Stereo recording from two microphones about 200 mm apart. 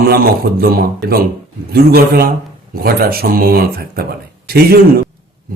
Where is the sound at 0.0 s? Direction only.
50° right (ahead or behind).